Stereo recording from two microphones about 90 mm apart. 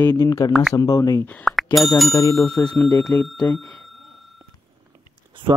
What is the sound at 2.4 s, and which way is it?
Speech, 15° left (ahead or behind).